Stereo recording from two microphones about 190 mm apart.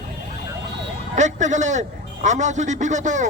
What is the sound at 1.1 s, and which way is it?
A man's voice, 40° right (ahead or behind).